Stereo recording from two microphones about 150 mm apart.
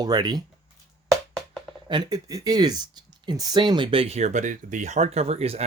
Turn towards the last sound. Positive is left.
turn(degrees=-45)  # may be behind; listen again after turning